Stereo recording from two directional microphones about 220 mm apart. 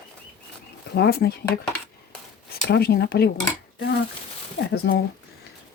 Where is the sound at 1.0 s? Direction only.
45° left (ahead or behind).